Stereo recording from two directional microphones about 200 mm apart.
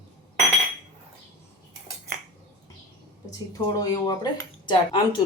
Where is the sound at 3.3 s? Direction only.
20° left (ahead or behind).